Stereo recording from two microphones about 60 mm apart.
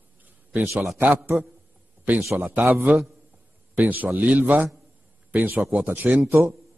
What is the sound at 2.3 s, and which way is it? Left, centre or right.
A man's voice, right.